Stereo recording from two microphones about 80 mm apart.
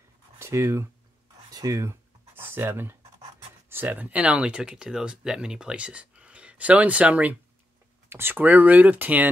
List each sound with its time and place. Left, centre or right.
0.4 s speech: right
1.5 s writing: right
3.6 s speech: right
8.1 s speech: right